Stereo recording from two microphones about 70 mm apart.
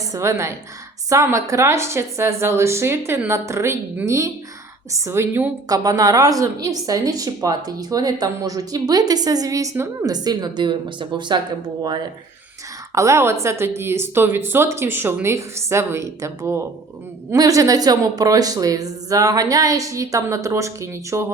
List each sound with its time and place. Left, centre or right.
0.1 s speech: right
5.6 s a woman's voice: right
9.7 s speech: right
10.1 s a woman's voice: right
12.9 s speech: right
17.3 s a woman's voice: right